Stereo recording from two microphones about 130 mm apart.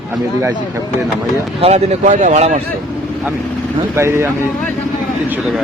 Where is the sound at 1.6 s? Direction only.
55° right (ahead or behind).